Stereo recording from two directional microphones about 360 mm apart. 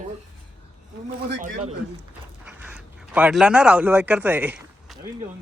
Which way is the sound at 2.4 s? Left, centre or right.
Centre.